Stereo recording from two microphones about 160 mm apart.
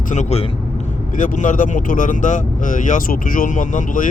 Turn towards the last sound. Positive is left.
turn(degrees=55)  # may be behind; listen again after turning